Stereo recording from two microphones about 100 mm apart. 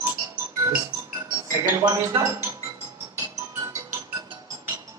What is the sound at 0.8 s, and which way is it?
Music, 40° right (ahead or behind).